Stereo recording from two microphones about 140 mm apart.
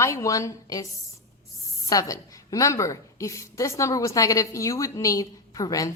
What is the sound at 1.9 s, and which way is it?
A woman's voice, 25° left (ahead or behind).